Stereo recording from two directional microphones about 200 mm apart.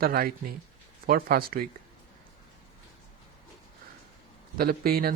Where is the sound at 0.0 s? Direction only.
50° right (ahead or behind).